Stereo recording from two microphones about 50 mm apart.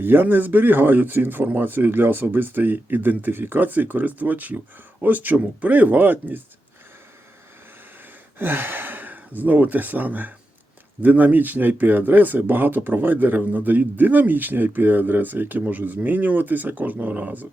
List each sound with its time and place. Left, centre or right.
0.0 s speech: right
8.4 s speech: right